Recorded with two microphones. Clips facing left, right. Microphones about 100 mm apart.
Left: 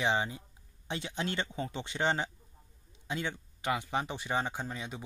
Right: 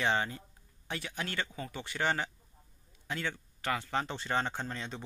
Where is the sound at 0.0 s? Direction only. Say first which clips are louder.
Even; 15° left (ahead or behind).